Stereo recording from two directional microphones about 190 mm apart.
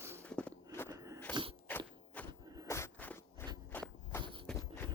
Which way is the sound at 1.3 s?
25° right (ahead or behind).